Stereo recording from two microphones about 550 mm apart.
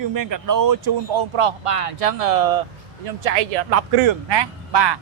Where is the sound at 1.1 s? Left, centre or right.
Right.